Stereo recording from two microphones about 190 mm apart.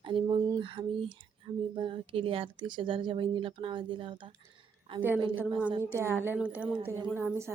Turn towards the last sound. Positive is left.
turn(degrees=-15)  # may be behind; listen again after turning